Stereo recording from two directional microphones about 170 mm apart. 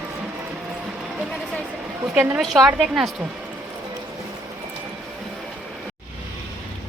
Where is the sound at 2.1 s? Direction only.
10° right (ahead or behind).